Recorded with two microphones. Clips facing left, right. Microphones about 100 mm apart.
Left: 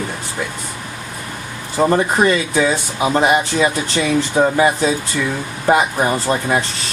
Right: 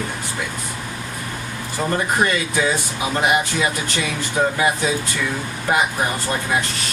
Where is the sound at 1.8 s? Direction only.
30° left (ahead or behind).